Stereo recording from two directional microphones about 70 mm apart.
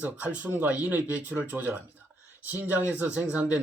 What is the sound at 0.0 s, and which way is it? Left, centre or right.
Speech, right.